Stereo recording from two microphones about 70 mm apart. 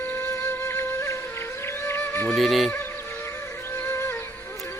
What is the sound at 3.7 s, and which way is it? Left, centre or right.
Music, left.